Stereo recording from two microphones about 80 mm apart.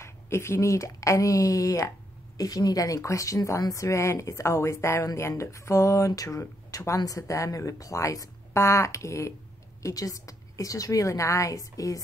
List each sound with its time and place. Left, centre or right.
0.0 s a woman's voice: left